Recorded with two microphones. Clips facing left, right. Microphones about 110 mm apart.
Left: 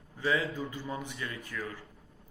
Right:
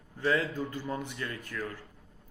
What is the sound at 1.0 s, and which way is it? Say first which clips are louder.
Speech: right 2 dB; 50° right (ahead or behind).